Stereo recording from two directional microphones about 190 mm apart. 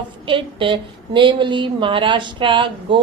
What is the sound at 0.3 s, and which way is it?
Speech, 25° right (ahead or behind).